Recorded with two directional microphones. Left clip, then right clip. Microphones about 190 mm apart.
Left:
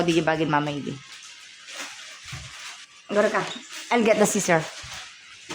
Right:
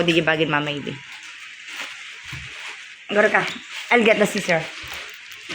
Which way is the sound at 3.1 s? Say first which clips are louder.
Right 5 dB; 10° right (ahead or behind).